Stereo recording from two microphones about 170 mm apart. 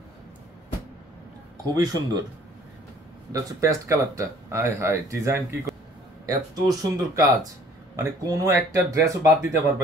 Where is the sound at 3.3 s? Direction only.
20° right (ahead or behind).